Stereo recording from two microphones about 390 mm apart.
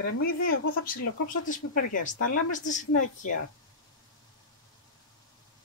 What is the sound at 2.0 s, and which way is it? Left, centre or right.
Speech, centre.